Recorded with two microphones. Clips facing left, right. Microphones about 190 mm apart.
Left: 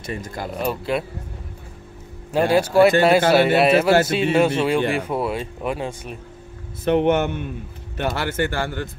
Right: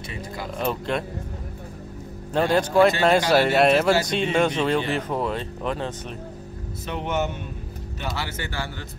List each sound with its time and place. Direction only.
0.0 s a man's voice: 45° left (ahead or behind)
0.6 s speech: 5° left (ahead or behind)
2.3 s speech: 10° left (ahead or behind)
6.8 s a man's voice: 60° left (ahead or behind)